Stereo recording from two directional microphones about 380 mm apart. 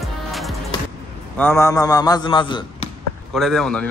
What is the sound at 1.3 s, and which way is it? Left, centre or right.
A man's voice, centre.